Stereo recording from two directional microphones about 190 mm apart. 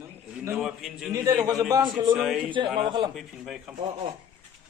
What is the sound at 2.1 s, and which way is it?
Speech, 5° right (ahead or behind).